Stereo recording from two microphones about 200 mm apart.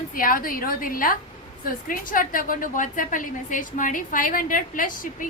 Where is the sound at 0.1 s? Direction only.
45° left (ahead or behind).